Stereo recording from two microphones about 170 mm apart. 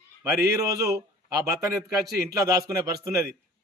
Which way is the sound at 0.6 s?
20° right (ahead or behind).